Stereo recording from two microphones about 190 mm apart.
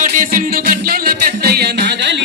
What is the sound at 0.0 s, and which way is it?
Music, 45° right (ahead or behind).